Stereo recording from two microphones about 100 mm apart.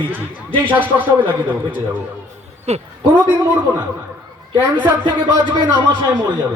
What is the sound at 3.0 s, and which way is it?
Speech, 15° right (ahead or behind).